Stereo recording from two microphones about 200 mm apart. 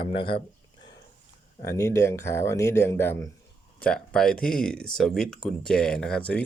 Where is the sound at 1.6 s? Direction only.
15° left (ahead or behind).